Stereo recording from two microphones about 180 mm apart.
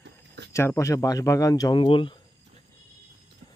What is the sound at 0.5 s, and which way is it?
A man's voice, 15° left (ahead or behind).